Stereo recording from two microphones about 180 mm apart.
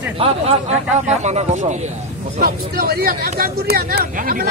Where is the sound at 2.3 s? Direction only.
55° right (ahead or behind).